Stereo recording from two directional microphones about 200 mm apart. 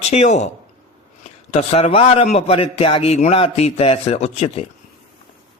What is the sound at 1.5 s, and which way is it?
A man's voice, 30° left (ahead or behind).